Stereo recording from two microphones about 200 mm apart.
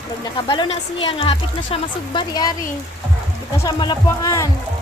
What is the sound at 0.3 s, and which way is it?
Speech, 20° left (ahead or behind).